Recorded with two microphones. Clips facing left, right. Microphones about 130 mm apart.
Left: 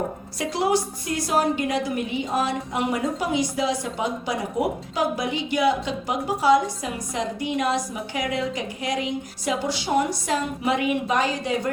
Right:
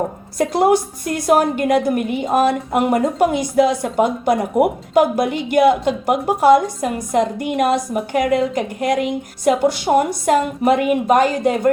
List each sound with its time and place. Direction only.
0.3 s a woman's voice: 50° right (ahead or behind)